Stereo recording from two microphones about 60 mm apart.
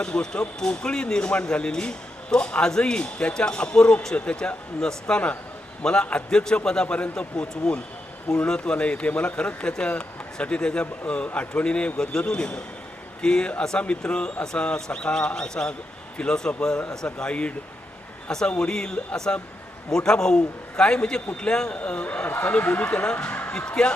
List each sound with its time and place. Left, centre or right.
0.0 s speech: centre